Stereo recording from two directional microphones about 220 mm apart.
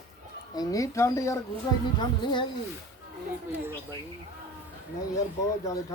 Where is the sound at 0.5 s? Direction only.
15° left (ahead or behind).